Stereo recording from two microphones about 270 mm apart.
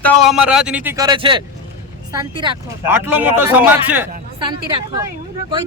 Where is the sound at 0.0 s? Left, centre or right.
Centre.